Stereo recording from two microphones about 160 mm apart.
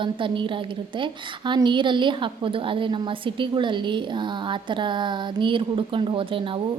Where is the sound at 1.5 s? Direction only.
30° right (ahead or behind).